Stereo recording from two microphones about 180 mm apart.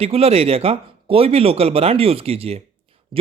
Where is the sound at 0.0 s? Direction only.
35° right (ahead or behind).